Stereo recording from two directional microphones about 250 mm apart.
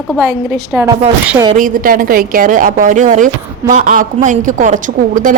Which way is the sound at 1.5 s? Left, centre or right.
Right.